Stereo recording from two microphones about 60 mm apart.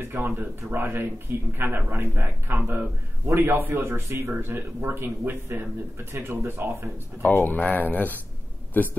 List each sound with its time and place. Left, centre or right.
0.0 s speech: right
7.2 s a man's voice: left